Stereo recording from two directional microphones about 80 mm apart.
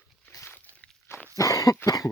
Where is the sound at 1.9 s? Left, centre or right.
Left.